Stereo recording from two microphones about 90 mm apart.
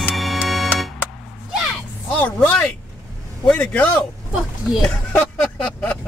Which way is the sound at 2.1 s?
15° left (ahead or behind).